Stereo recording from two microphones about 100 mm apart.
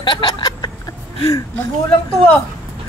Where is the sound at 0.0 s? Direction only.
50° left (ahead or behind).